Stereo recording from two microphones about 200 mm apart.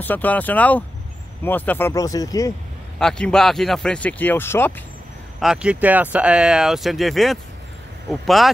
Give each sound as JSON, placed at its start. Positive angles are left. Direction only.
{"t": 0.0, "sound": "speech", "side_deg": 10}
{"t": 3.0, "sound": "speech", "side_deg": 5}
{"t": 5.4, "sound": "speech", "side_deg": -5}